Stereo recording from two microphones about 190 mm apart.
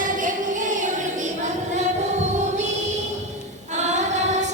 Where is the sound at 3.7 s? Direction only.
40° right (ahead or behind).